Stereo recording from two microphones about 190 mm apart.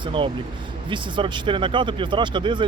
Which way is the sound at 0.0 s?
25° right (ahead or behind).